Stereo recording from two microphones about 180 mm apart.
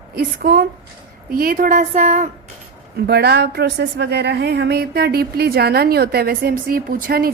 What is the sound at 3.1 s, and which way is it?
A woman's voice, 65° right (ahead or behind).